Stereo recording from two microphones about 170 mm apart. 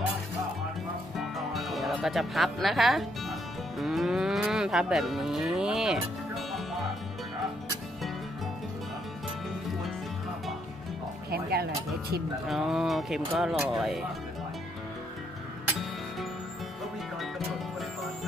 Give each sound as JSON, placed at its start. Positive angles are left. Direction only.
{"t": 1.1, "sound": "music", "side_deg": 0}
{"t": 3.8, "sound": "moo", "side_deg": 0}
{"t": 11.2, "sound": "music", "side_deg": -65}
{"t": 12.4, "sound": "speech", "side_deg": 0}